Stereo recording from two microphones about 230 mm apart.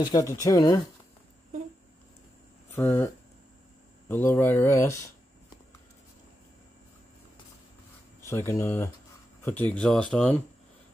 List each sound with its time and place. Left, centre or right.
0.0 s speech: centre
2.7 s speech: centre
4.1 s speech: centre
8.3 s speech: centre